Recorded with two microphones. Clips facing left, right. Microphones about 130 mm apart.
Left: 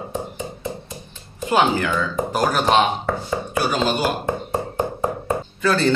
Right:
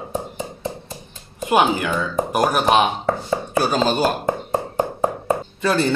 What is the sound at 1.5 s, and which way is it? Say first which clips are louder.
Speech: right 1 dB; 15° right (ahead or behind).